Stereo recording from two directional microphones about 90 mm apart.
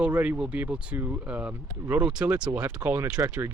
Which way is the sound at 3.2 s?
35° right (ahead or behind).